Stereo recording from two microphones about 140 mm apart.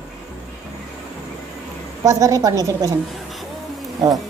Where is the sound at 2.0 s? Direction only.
25° right (ahead or behind).